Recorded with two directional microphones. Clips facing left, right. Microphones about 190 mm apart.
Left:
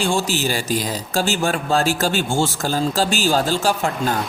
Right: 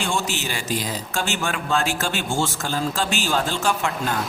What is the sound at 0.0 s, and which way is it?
A man's voice, 35° left (ahead or behind).